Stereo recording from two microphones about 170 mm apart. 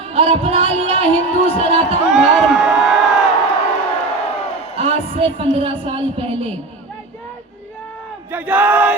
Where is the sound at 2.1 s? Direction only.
Centre (ahead or behind).